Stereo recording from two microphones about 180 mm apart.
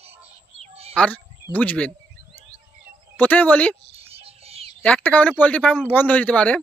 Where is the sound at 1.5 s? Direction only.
10° left (ahead or behind).